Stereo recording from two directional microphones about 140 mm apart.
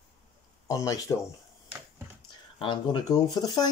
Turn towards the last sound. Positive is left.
turn(degrees=30)  # may be behind; listen again after turning